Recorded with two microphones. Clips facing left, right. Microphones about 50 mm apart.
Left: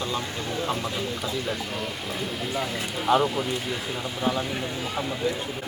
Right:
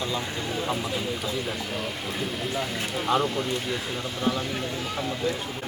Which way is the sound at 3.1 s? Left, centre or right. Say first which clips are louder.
Left 3 dB; centre.